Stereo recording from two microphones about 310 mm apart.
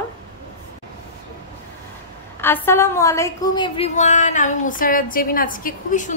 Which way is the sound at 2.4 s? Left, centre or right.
Centre.